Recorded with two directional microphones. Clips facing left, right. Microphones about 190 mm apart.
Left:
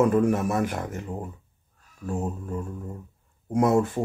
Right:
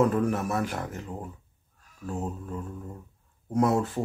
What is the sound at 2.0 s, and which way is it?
Speech, 10° left (ahead or behind).